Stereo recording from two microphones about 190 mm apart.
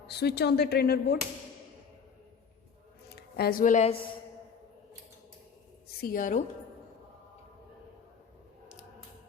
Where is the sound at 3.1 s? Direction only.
55° left (ahead or behind); by 4.0 s 35° left (ahead or behind).